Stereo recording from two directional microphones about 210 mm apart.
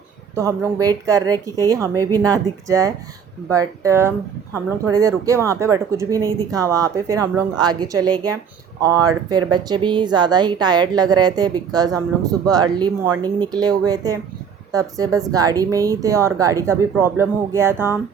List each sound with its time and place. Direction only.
0.3 s speech: 15° right (ahead or behind)
9.3 s a woman's voice: 20° right (ahead or behind)